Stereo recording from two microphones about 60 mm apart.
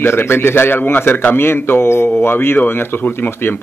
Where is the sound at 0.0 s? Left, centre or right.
Left.